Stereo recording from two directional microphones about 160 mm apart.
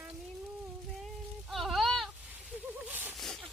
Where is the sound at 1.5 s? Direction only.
Centre (ahead or behind).